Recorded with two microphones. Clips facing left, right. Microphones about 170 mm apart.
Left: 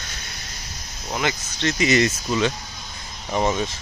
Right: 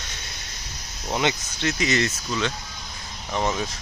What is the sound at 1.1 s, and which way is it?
Speech, 25° right (ahead or behind).